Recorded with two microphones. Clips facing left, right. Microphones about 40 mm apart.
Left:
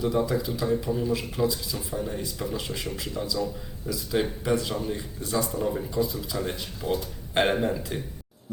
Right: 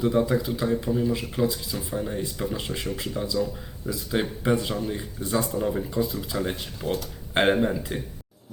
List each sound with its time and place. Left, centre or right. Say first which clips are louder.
0.0 s speech: right 2 dB; right
4.7 s speech: right 1 dB; centre
4.9 s speech: right 2 dB; right
6.8 s speech: even; centre
7.3 s speech: right 2 dB; centre